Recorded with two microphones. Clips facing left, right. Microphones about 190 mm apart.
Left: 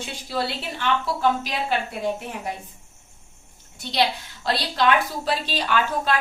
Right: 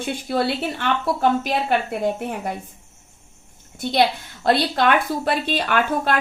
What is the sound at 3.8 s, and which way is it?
A woman's voice, 55° right (ahead or behind).